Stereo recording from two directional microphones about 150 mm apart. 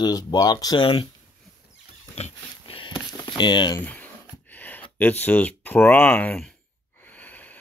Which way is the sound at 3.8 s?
10° left (ahead or behind).